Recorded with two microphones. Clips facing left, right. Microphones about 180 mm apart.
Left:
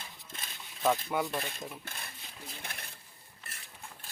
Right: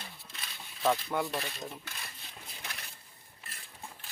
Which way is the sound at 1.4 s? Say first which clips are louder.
Even; 50° left (ahead or behind).